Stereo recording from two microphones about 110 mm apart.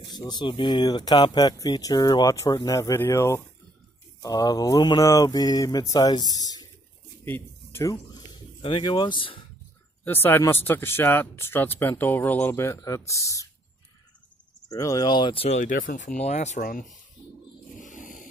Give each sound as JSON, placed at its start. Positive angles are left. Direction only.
{"t": 0.3, "sound": "speech", "side_deg": 45}
{"t": 7.2, "sound": "a sound", "side_deg": 20}
{"t": 8.6, "sound": "speech", "side_deg": 50}
{"t": 10.0, "sound": "speech", "side_deg": 20}
{"t": 14.7, "sound": "speech", "side_deg": 30}
{"t": 15.3, "sound": "speech", "side_deg": 65}
{"t": 16.2, "sound": "speech", "side_deg": 90}